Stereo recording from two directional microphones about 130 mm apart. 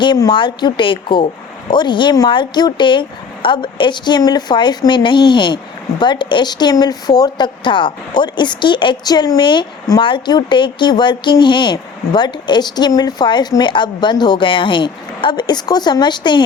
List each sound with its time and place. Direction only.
0.0 s speech: 35° left (ahead or behind)